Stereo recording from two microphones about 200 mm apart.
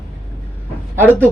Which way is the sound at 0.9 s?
10° right (ahead or behind).